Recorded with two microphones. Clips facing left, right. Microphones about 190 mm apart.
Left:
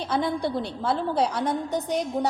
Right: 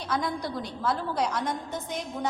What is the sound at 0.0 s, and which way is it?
A woman's voice, 30° left (ahead or behind).